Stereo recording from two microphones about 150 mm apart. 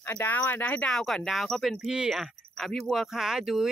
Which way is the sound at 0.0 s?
15° left (ahead or behind).